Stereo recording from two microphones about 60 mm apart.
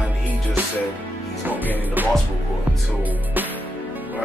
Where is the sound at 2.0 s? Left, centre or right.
Right.